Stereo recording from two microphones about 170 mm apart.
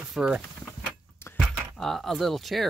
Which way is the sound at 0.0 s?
5° right (ahead or behind).